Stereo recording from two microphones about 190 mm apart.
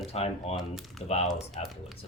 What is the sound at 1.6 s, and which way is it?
Speech, 35° left (ahead or behind).